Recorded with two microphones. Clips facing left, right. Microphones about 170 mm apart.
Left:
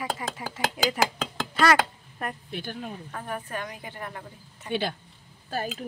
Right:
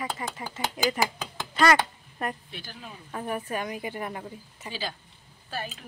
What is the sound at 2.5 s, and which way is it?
Speech, 50° left (ahead or behind).